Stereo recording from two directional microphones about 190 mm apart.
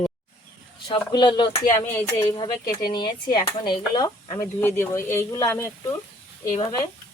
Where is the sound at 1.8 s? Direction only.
10° left (ahead or behind).